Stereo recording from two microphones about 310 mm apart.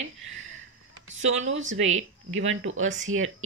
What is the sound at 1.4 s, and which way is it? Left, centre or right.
Speech, right.